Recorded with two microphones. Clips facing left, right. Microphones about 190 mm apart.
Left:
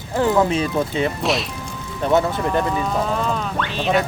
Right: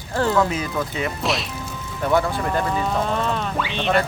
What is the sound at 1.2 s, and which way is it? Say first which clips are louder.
Speech: left 3 dB; centre (ahead or behind).